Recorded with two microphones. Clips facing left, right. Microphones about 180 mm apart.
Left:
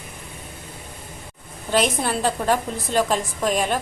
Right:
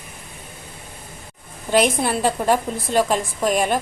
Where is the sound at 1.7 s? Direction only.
10° right (ahead or behind).